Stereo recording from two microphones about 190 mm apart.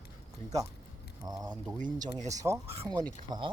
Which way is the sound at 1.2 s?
20° right (ahead or behind).